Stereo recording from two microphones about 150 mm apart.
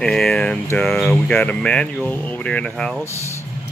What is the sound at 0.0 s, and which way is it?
Speech, 5° left (ahead or behind).